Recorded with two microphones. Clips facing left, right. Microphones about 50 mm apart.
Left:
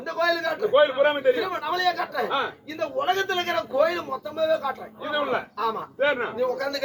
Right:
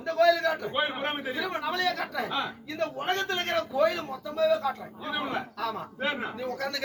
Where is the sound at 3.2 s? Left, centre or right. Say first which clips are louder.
Left 5 dB; right.